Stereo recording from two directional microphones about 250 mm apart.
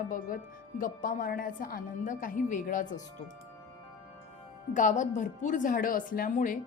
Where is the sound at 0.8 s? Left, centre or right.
Left.